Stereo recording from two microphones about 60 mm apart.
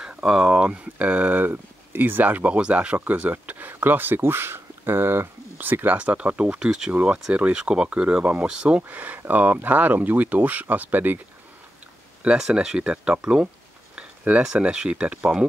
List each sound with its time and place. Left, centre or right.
0.0 s speech: centre
1.5 s speech: right; by 6.9 s centre
6.9 s speech: right
12.2 s speech: centre